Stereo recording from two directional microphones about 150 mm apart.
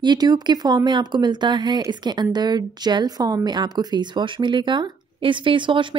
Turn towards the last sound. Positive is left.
turn(degrees=-35)  # may be behind; listen again after turning